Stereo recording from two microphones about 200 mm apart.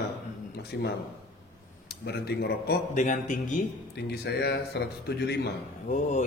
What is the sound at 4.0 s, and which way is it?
A man's voice, 55° left (ahead or behind).